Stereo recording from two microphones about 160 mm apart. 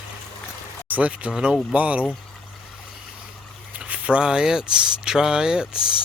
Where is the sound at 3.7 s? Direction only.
10° right (ahead or behind).